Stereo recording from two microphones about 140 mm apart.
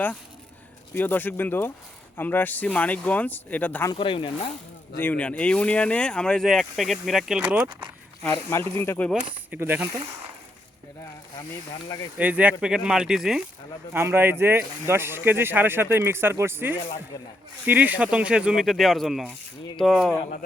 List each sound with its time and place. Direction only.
0.9 s speech: 15° left (ahead or behind)
3.9 s speech: 40° left (ahead or behind)
4.9 s speech: 10° left (ahead or behind); by 7.6 s 10° right (ahead or behind)
8.8 s speech: 15° left (ahead or behind)
9.5 s speech: 15° right (ahead or behind)
12.1 s speech: 10° right (ahead or behind)
13.9 s speech: 15° right (ahead or behind); by 20.1 s 5° left (ahead or behind)